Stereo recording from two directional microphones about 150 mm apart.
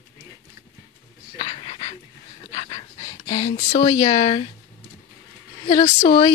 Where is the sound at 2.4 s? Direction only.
35° left (ahead or behind).